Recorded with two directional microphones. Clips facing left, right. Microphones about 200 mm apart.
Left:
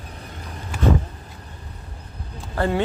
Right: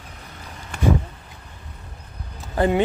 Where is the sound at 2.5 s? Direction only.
15° right (ahead or behind).